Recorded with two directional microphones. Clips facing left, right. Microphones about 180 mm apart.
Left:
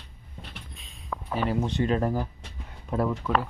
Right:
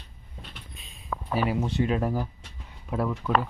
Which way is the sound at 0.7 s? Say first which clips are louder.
Right 2 dB; centre (ahead or behind).